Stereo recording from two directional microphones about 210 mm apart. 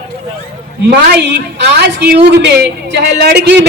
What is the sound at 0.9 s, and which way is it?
A woman's voice, 55° right (ahead or behind).